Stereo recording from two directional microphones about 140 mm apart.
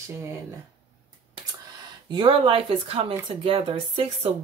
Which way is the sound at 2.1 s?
40° right (ahead or behind).